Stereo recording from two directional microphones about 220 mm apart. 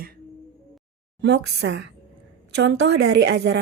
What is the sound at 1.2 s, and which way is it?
A woman's voice, 50° right (ahead or behind).